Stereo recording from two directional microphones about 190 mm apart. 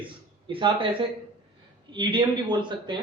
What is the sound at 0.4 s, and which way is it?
A man's voice, 25° right (ahead or behind).